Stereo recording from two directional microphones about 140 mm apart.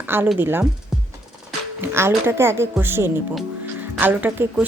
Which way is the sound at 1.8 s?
15° right (ahead or behind).